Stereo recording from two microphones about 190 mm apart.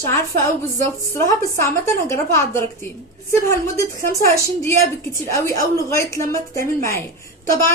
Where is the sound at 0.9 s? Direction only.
15° left (ahead or behind).